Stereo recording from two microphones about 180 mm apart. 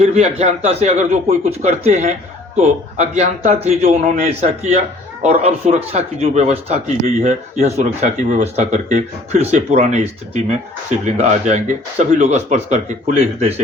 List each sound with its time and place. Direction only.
0.0 s speech: 35° right (ahead or behind)